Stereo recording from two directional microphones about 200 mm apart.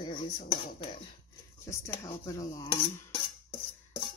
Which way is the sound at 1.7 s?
15° left (ahead or behind).